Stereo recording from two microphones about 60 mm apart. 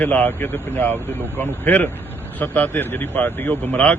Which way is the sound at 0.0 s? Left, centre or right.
Left.